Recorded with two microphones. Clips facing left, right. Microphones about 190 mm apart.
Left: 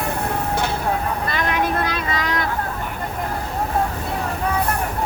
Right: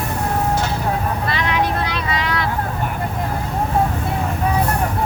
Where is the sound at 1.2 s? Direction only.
50° left (ahead or behind).